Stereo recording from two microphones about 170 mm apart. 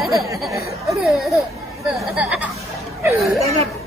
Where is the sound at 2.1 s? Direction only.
5° right (ahead or behind).